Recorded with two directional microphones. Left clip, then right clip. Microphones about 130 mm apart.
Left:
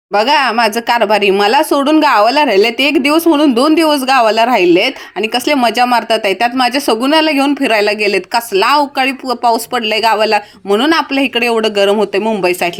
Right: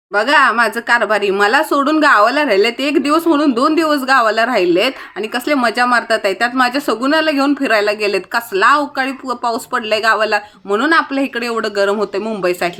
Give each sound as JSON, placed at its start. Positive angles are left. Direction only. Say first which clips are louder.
{"t": 0.1, "sound": "speech", "louder": "left 1 dB", "side_deg": 30}
{"t": 12.4, "sound": "speech", "louder": "left 3 dB", "side_deg": 30}